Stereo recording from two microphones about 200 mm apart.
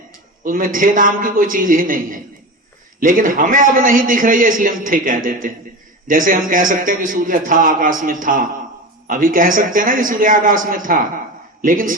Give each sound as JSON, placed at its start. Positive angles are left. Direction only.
{"t": 0.4, "sound": "a man's voice", "side_deg": -45}